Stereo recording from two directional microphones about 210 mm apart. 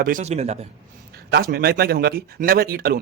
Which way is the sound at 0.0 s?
35° right (ahead or behind).